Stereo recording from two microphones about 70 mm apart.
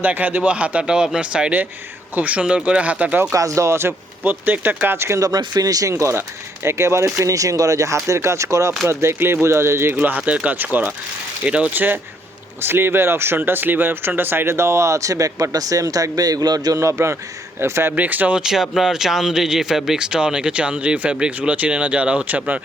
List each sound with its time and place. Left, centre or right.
0.0 s speech: right
3.3 s speech: right
4.2 s speech: right
4.9 s speech: right
5.2 s speech: right
9.9 s speech: right
16.7 s speech: right
17.9 s speech: right
18.3 s speech: centre